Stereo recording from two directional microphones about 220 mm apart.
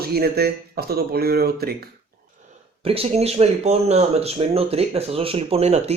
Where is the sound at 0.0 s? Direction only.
45° right (ahead or behind).